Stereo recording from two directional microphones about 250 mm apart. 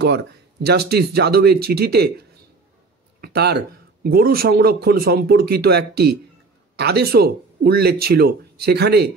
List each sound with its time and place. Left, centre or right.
0.0 s speech: right